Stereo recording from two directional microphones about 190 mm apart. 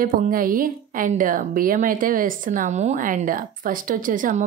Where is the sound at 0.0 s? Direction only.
45° right (ahead or behind).